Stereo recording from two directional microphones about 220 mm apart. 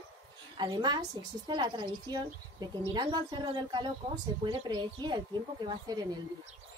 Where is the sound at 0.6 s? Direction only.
20° right (ahead or behind).